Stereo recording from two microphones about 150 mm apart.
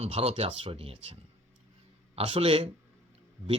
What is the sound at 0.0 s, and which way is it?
Speech, 40° right (ahead or behind).